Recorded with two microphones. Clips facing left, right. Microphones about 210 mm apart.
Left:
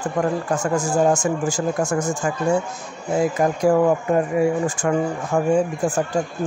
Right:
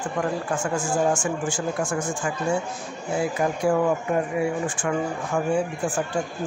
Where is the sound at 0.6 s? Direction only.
40° left (ahead or behind).